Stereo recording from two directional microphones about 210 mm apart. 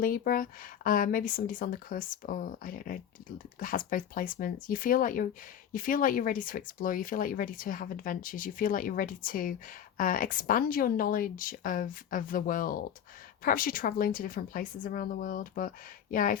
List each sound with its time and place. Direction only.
0.0 s speech: 40° left (ahead or behind)